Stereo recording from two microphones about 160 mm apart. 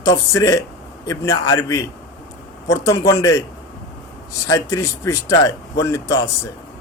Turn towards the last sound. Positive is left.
turn(degrees=20)  # may be behind; listen again after turning